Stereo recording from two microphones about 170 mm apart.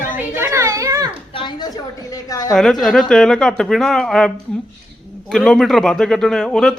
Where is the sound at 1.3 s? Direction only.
30° left (ahead or behind).